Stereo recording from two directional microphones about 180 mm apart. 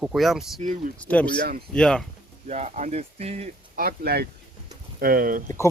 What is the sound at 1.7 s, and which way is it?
Speech, 5° left (ahead or behind).